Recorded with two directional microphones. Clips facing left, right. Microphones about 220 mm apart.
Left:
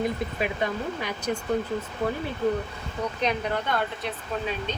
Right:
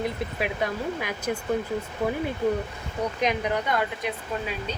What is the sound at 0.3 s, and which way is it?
Speech, 5° right (ahead or behind).